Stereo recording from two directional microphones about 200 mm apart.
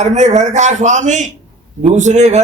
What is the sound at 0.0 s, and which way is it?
A man's voice, 35° right (ahead or behind).